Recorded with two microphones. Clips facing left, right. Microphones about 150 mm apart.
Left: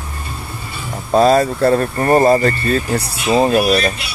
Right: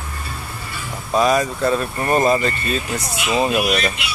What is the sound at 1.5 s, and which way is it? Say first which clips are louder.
Speech: left 5 dB; 55° left (ahead or behind).